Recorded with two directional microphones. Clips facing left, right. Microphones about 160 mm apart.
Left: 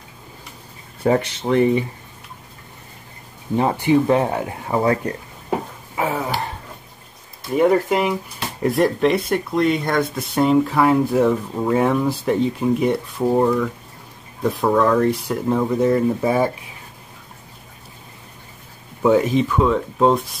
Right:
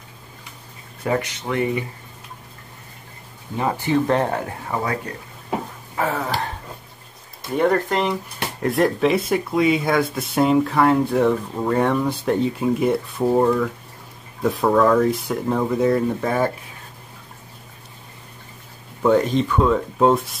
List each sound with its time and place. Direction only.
1.0 s speech: 30° left (ahead or behind)
3.7 s speech: 15° left (ahead or behind)
5.9 s a sound: 10° left (ahead or behind)
7.5 s speech: 5° left (ahead or behind)
19.0 s speech: 5° left (ahead or behind)